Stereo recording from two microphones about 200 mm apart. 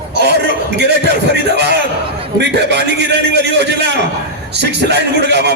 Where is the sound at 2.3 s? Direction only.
55° right (ahead or behind).